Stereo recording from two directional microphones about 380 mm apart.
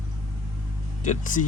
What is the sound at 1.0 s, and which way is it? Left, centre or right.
Speech, centre.